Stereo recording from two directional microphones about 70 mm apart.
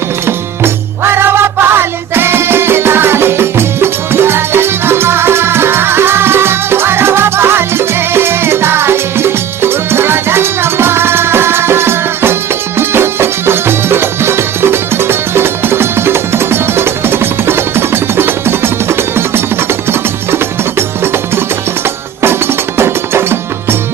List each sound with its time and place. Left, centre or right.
0.3 s music: right